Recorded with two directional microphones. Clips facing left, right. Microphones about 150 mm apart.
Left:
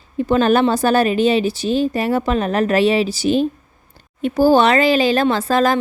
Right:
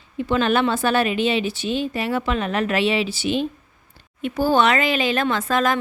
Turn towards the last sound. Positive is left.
turn(degrees=35)  # may be behind; listen again after turning